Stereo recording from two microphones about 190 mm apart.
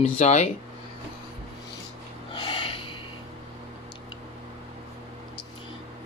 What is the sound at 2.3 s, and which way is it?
Snort, 25° left (ahead or behind).